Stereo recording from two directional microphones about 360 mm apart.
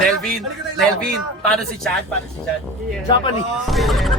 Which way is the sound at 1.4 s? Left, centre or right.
Centre.